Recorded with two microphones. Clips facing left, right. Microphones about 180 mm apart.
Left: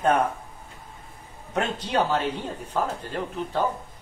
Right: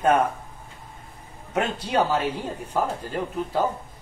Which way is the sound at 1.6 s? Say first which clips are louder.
Right 1 dB; 10° right (ahead or behind).